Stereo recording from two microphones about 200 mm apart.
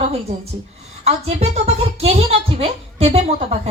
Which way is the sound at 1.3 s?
30° right (ahead or behind).